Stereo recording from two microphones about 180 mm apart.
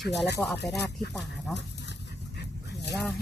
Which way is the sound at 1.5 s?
75° left (ahead or behind).